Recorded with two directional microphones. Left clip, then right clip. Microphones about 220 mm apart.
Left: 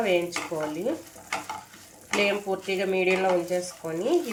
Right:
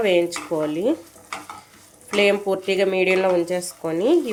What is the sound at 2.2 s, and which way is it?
Speech, 50° right (ahead or behind).